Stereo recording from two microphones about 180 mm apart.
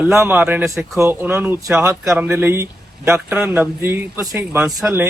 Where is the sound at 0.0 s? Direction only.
10° right (ahead or behind).